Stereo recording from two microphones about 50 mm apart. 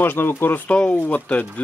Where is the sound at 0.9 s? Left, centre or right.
Left.